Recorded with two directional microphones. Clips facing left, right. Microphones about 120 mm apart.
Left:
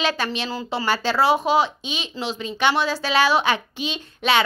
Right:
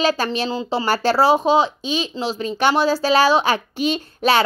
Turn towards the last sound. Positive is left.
turn(degrees=-40)  # may be behind; listen again after turning